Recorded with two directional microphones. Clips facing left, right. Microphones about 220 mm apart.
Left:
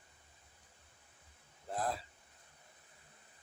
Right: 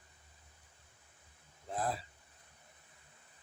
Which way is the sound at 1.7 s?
Centre (ahead or behind).